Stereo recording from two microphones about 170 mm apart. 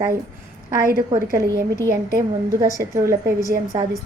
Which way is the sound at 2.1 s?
20° right (ahead or behind).